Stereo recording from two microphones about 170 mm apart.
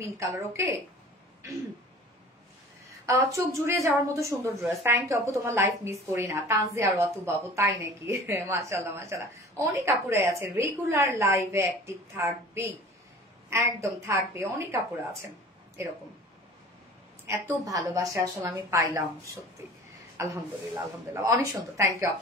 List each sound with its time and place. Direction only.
0.0 s a woman's voice: 15° right (ahead or behind)
3.1 s a woman's voice: 15° right (ahead or behind)
17.3 s a woman's voice: 15° right (ahead or behind)